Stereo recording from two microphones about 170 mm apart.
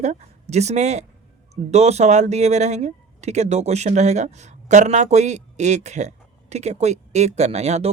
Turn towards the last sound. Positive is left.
turn(degrees=-40)  # may be behind; listen again after turning